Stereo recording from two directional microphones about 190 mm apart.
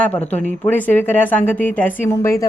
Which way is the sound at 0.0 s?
10° left (ahead or behind).